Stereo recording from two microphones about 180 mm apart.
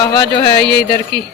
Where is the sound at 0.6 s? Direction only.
75° left (ahead or behind).